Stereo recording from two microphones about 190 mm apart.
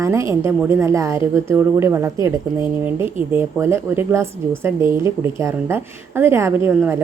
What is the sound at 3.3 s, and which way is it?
A woman's voice, 15° right (ahead or behind).